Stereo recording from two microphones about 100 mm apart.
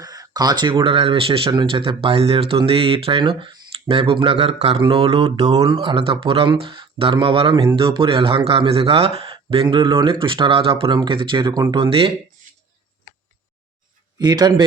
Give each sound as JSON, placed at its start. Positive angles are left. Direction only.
{"t": 0.0, "sound": "a sound", "side_deg": -40}
{"t": 0.9, "sound": "speech", "side_deg": -70}
{"t": 4.8, "sound": "speech", "side_deg": -60}
{"t": 5.6, "sound": "speech", "side_deg": -55}
{"t": 10.9, "sound": "speech", "side_deg": -50}
{"t": 14.2, "sound": "speech", "side_deg": -45}